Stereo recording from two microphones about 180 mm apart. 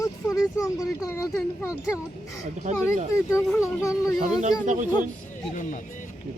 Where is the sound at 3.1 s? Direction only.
15° left (ahead or behind).